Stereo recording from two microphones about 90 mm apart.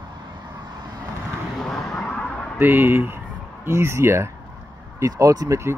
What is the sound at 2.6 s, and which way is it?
Speech, 25° right (ahead or behind).